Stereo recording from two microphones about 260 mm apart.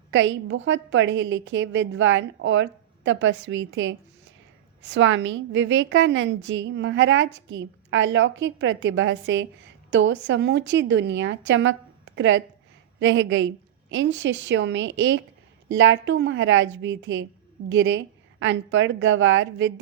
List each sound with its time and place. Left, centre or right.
0.1 s a woman's voice: right